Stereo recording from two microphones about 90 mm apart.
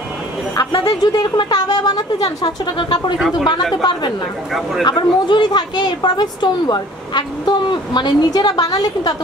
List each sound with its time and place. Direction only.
0.6 s a woman's voice: 50° left (ahead or behind)
4.8 s speech: 55° left (ahead or behind)